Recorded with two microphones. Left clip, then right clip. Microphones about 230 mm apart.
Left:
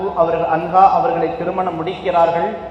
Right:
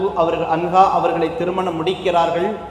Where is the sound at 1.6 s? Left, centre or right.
Right.